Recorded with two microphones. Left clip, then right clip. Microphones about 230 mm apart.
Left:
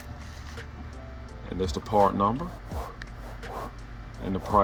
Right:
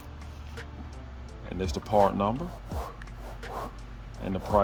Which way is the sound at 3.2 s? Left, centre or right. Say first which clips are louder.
Even; centre.